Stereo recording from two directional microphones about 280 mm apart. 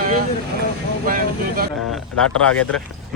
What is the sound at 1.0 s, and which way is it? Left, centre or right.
Speech, right.